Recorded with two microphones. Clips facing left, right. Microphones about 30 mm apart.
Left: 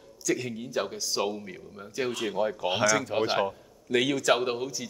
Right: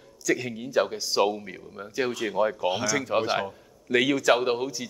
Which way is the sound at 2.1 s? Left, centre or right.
Centre.